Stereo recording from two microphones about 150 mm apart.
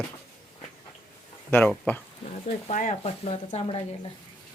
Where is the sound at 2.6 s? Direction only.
55° left (ahead or behind).